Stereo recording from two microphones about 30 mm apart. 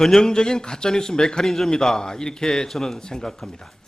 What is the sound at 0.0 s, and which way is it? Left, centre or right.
A man's voice, centre.